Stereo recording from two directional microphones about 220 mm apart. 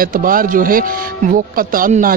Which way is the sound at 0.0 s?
40° right (ahead or behind).